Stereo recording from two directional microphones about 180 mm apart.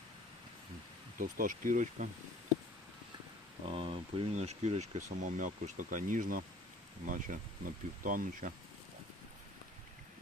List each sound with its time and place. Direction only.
1.2 s speech: 50° right (ahead or behind)
3.7 s speech: 30° right (ahead or behind); by 8.5 s 50° right (ahead or behind)